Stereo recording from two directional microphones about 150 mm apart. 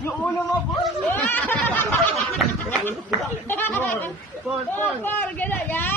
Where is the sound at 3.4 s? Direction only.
15° left (ahead or behind).